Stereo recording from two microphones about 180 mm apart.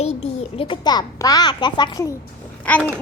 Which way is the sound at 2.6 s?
10° left (ahead or behind).